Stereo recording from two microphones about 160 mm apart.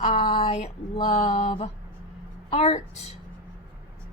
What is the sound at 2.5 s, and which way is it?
Speech, 40° left (ahead or behind).